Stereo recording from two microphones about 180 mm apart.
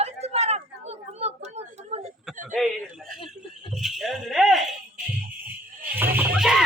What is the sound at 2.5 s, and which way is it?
Speech, centre (ahead or behind).